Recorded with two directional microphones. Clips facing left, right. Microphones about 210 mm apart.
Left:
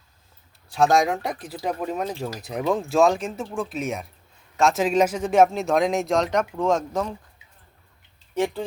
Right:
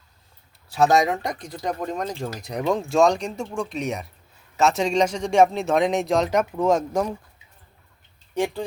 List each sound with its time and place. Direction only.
0.7 s speech: centre (ahead or behind)